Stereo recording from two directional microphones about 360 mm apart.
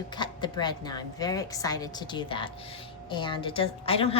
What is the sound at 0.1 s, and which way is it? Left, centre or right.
A woman's voice, centre.